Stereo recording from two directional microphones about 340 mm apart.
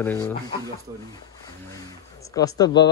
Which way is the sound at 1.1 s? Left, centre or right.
Centre.